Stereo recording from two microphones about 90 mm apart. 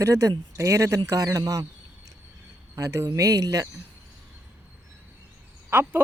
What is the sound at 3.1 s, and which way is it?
Speech, 40° right (ahead or behind).